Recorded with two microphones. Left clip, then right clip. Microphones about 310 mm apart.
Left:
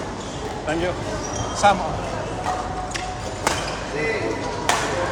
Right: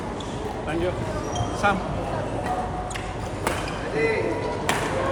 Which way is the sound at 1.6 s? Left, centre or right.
Centre.